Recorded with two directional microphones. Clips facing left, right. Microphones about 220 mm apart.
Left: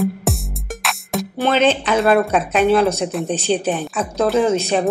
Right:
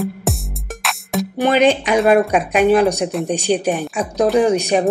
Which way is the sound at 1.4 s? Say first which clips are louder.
Right 2 dB; 15° right (ahead or behind).